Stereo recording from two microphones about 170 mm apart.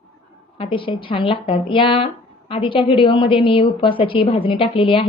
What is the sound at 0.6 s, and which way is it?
A woman's voice, 30° left (ahead or behind).